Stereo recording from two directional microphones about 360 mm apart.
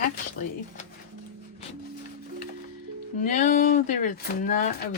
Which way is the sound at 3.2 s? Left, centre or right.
Left.